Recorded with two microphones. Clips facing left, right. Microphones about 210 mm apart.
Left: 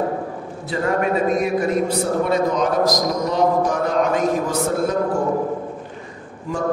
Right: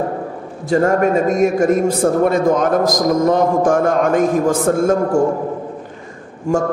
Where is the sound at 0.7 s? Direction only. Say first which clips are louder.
Right 6 dB; 45° right (ahead or behind).